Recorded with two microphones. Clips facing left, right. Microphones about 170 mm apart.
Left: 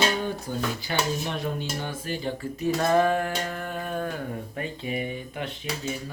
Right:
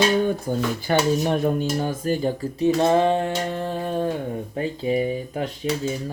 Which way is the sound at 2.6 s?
25° right (ahead or behind).